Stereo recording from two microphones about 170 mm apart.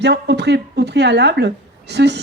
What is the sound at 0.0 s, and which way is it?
Speech, 85° right.